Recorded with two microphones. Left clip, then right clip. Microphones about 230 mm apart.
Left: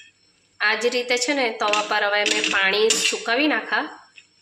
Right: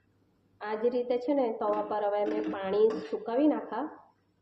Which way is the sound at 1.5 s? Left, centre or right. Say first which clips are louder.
Left 9 dB; left.